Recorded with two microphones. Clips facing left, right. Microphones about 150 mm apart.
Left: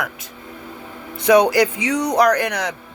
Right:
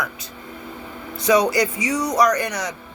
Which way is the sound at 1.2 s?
60° left (ahead or behind).